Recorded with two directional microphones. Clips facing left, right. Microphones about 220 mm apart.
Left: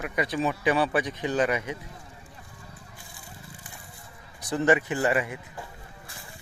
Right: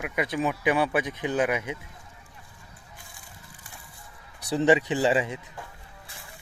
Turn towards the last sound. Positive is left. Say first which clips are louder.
# right 2 dB
turn(degrees=-20)  # may be behind; listen again after turning